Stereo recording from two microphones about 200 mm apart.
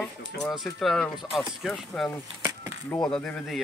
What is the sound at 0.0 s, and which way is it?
Speech, centre (ahead or behind).